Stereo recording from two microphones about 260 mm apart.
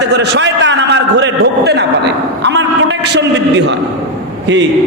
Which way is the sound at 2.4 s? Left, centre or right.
Right.